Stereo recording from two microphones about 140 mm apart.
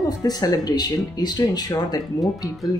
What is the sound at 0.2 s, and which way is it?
Speech, 25° left (ahead or behind).